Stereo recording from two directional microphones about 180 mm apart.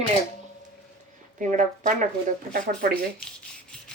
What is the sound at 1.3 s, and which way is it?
Speech, 45° right (ahead or behind).